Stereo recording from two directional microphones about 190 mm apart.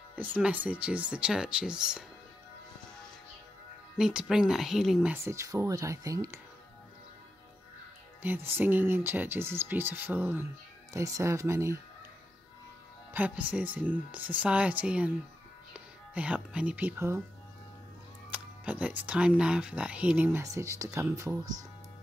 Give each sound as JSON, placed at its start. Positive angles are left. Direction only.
{"t": 0.1, "sound": "speech", "side_deg": -10}
{"t": 4.0, "sound": "speech", "side_deg": -5}
{"t": 5.1, "sound": "speech", "side_deg": -15}
{"t": 8.2, "sound": "speech", "side_deg": -10}
{"t": 13.1, "sound": "speech", "side_deg": -10}
{"t": 16.2, "sound": "speech", "side_deg": -5}
{"t": 18.3, "sound": "speech", "side_deg": -5}